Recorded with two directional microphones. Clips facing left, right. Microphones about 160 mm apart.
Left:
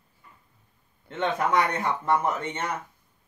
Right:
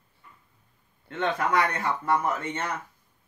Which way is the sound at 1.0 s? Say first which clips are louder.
Left 1 dB; 20° left (ahead or behind).